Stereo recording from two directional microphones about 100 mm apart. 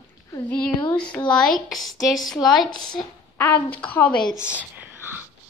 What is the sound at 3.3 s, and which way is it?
Speech, 20° left (ahead or behind).